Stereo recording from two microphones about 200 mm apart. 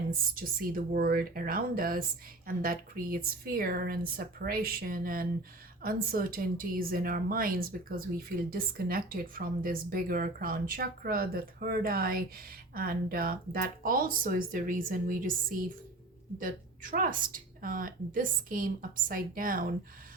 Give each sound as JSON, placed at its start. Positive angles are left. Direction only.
{"t": 0.1, "sound": "speech", "side_deg": -45}